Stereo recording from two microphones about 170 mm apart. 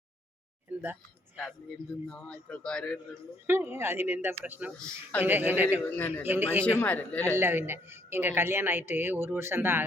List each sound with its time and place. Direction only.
0.7 s speech: 10° right (ahead or behind)
2.0 s a man's voice: 5° left (ahead or behind)
3.4 s speech: 15° right (ahead or behind)
6.0 s speech: 10° left (ahead or behind)
6.2 s speech: 10° right (ahead or behind)
6.7 s speech: 10° left (ahead or behind)
7.3 s speech: 15° right (ahead or behind)